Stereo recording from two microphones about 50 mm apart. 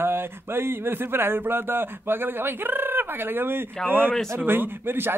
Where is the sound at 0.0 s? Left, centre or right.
Right.